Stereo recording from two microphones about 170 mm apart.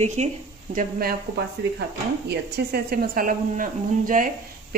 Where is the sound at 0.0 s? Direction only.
40° right (ahead or behind).